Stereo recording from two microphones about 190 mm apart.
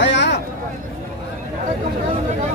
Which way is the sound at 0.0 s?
65° left (ahead or behind).